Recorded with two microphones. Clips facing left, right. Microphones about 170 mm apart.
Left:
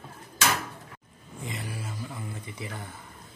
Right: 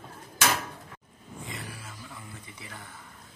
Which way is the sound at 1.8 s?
20° left (ahead or behind).